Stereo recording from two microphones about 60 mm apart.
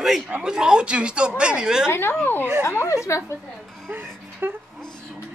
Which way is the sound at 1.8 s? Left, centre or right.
Left.